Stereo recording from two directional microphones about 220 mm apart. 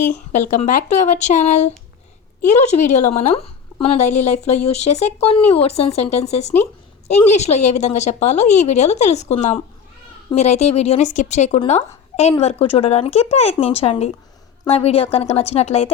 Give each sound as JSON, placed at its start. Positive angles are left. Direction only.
{"t": 0.0, "sound": "a woman's voice", "side_deg": 35}